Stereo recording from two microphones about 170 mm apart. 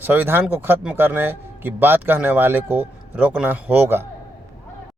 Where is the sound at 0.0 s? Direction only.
10° right (ahead or behind).